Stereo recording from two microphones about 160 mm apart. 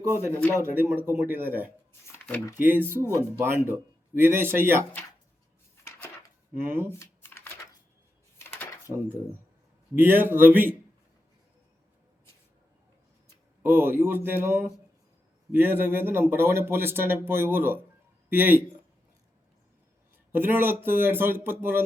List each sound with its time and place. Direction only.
0.3 s speech: 10° left (ahead or behind)
0.5 s speech: 15° right (ahead or behind)
1.9 s shuffling cards: 10° left (ahead or behind)
2.6 s speech: 10° right (ahead or behind)
6.5 s speech: 15° right (ahead or behind)
7.0 s shuffling cards: 15° left (ahead or behind)
8.4 s a sound: 15° left (ahead or behind)
9.9 s speech: 15° right (ahead or behind)
13.6 s speech: 15° right (ahead or behind)
20.3 s speech: 15° right (ahead or behind)